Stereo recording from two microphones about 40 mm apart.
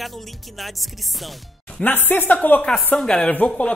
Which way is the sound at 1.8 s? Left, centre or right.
Left.